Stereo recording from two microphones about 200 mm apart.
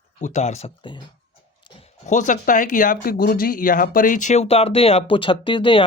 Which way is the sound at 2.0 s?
40° left (ahead or behind).